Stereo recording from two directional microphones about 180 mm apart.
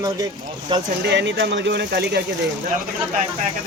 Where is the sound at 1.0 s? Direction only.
80° right.